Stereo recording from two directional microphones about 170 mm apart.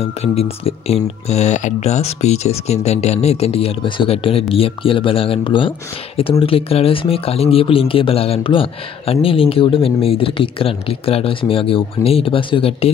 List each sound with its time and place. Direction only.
0.0 s speech: 35° left (ahead or behind)